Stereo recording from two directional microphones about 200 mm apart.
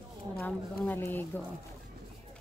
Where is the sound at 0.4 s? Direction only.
10° left (ahead or behind).